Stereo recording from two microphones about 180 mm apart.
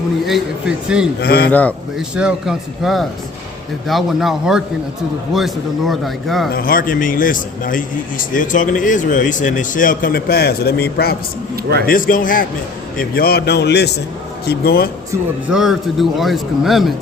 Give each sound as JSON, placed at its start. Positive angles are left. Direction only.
{"t": 0.3, "sound": "a man's voice", "side_deg": -5}
{"t": 1.2, "sound": "a man's voice", "side_deg": 60}
{"t": 1.5, "sound": "speech", "side_deg": 10}
{"t": 2.0, "sound": "a man's voice", "side_deg": -5}
{"t": 6.5, "sound": "a man's voice", "side_deg": 55}
{"t": 11.9, "sound": "a man's voice", "side_deg": 50}
{"t": 15.1, "sound": "a man's voice", "side_deg": -5}